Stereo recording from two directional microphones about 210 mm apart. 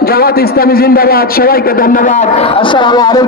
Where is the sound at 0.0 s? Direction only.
45° left (ahead or behind).